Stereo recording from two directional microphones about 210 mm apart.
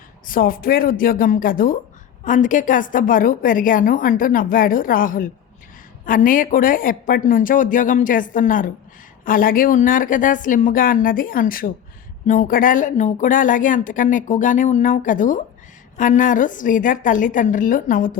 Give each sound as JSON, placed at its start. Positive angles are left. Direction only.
{"t": 0.3, "sound": "a woman's voice", "side_deg": 45}